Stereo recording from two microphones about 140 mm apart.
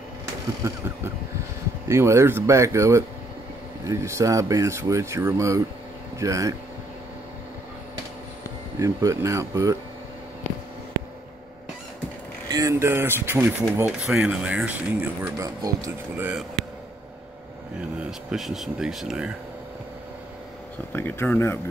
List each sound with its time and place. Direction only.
1.9 s speech: 20° right (ahead or behind)
8.7 s speech: 20° right (ahead or behind)
12.4 s speech: 25° right (ahead or behind); by 15.0 s 10° right (ahead or behind)
15.3 s speech: 25° right (ahead or behind)
18.3 s speech: centre (ahead or behind)
20.9 s speech: 15° left (ahead or behind)